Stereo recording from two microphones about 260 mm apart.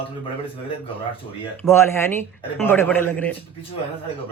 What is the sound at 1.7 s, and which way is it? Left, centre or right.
Speech, centre.